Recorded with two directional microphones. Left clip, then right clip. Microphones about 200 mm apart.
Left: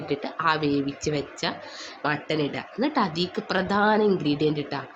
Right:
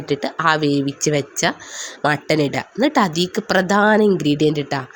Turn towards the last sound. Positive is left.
turn(degrees=-45)  # may be behind; listen again after turning